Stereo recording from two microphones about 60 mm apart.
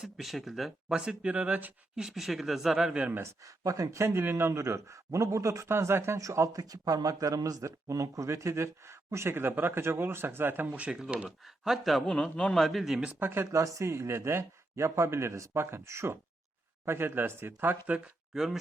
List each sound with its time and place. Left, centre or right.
0.0 s speech: centre; by 1.7 s right
2.0 s speech: centre
3.2 s speech: right
4.0 s speech: right
6.1 s speech: right
10.8 s speech: centre
13.1 s speech: right
13.4 s speech: right
17.8 s speech: right